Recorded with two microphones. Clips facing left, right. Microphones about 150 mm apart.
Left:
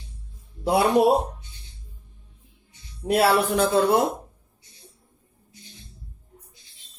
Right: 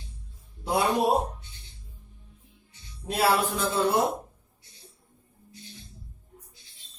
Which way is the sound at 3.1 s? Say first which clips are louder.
Left 5 dB; 65° left (ahead or behind).